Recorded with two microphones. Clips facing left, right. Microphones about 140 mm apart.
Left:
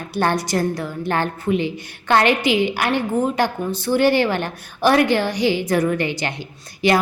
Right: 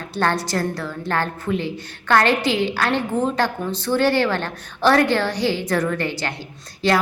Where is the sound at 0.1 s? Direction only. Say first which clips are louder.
Left 2 dB; 15° left (ahead or behind).